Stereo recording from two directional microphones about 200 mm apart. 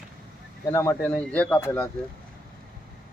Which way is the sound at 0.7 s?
15° left (ahead or behind).